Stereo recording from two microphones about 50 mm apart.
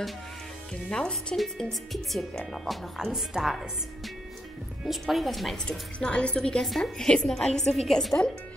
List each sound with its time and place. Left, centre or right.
0.8 s a woman's voice: left
1.6 s a woman's voice: centre
5.7 s a woman's voice: left